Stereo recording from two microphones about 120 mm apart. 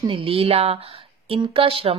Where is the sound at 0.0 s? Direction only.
50° right (ahead or behind).